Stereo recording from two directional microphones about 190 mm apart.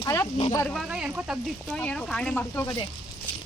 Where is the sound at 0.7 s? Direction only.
Centre (ahead or behind).